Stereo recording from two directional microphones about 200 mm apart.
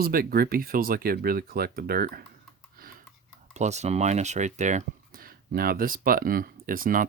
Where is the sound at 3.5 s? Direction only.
35° right (ahead or behind).